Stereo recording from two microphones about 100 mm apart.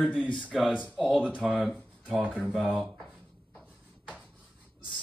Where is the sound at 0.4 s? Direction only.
5° right (ahead or behind).